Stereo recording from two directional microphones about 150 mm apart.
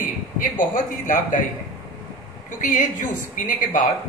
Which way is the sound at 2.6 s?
60° left (ahead or behind).